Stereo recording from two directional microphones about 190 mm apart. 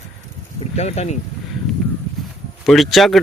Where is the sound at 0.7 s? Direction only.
35° left (ahead or behind).